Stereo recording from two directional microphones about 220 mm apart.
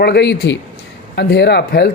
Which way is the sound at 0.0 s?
50° left (ahead or behind).